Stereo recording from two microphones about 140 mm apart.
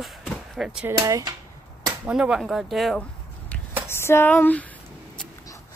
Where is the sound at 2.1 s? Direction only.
5° right (ahead or behind).